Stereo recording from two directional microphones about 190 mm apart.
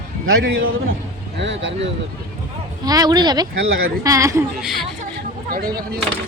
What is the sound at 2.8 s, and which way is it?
Speech, 20° right (ahead or behind).